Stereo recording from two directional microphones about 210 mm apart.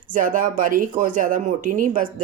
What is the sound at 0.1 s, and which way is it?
Speech, 40° right (ahead or behind).